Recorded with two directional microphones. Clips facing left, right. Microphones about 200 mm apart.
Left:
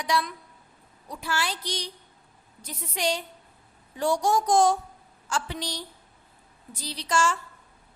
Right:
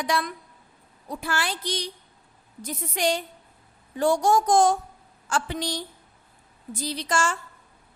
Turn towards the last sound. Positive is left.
turn(degrees=-50)  # may be behind; listen again after turning